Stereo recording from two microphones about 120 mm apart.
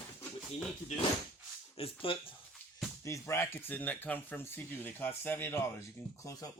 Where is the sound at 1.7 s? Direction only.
50° left (ahead or behind).